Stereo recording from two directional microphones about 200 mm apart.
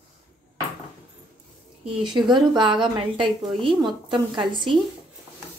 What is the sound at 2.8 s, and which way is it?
A woman's voice, 25° right (ahead or behind).